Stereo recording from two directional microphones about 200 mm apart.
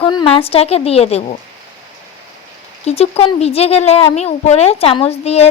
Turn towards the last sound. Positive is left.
turn(degrees=30)  # may be behind; listen again after turning